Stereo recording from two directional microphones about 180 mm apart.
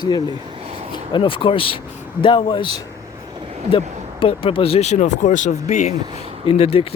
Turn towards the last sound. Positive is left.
turn(degrees=35)  # may be behind; listen again after turning